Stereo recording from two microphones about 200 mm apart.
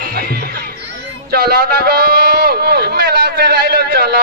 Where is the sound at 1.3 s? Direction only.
50° right (ahead or behind).